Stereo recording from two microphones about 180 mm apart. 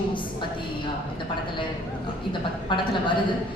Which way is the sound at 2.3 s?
25° left (ahead or behind).